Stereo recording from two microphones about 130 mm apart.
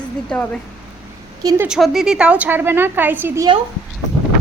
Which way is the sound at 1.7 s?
Centre (ahead or behind).